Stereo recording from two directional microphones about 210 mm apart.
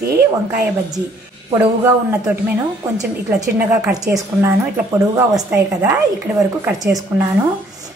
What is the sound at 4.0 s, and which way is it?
A woman's voice, 15° right (ahead or behind).